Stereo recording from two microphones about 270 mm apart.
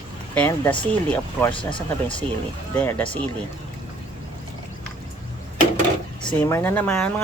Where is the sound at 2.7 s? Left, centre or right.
Centre.